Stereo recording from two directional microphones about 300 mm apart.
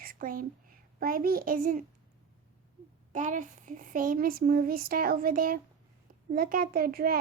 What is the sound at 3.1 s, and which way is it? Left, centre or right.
A child's voice, right.